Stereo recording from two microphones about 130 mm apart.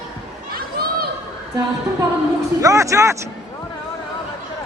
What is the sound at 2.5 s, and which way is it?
Speech, 25° right (ahead or behind).